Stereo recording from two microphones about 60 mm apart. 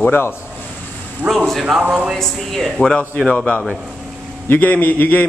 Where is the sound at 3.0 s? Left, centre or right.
Left.